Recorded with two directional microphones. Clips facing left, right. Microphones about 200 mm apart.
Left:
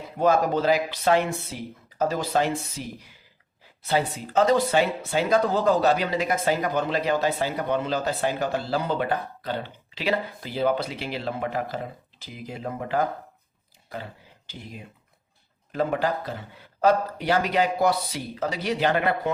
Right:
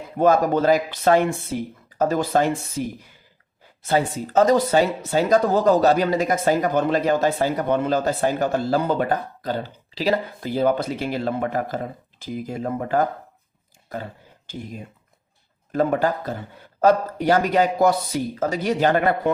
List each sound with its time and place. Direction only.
0.2 s speech: 50° right (ahead or behind)